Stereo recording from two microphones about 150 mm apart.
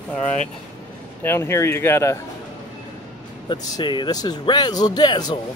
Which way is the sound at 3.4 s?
30° left (ahead or behind).